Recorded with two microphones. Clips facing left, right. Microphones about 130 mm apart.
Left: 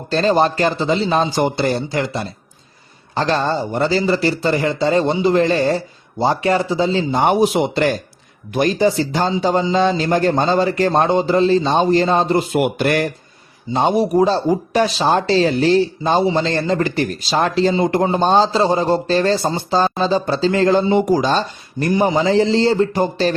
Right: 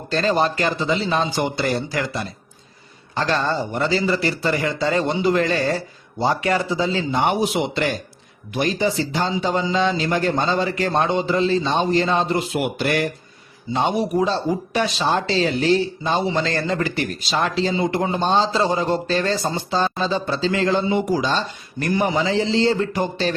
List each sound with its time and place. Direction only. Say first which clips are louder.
0.1 s speech: left 4 dB; 35° left (ahead or behind)
1.6 s speech: left 4 dB; 30° left (ahead or behind)
12.5 s speech: left 4 dB; 55° left (ahead or behind)
13.7 s speech: left 5 dB; 35° left (ahead or behind)